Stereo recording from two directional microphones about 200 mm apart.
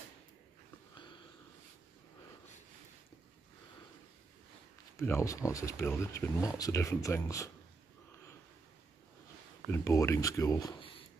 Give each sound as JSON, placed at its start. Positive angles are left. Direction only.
{"t": 4.9, "sound": "speech", "side_deg": 15}
{"t": 9.7, "sound": "speech", "side_deg": 15}